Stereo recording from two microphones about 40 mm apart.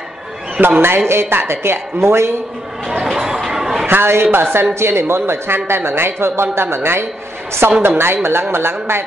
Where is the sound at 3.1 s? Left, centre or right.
Centre.